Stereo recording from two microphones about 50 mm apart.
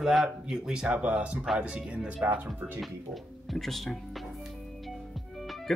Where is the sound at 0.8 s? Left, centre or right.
Right.